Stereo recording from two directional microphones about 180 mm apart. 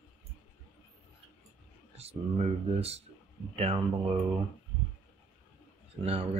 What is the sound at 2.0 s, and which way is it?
Speech, 35° right (ahead or behind).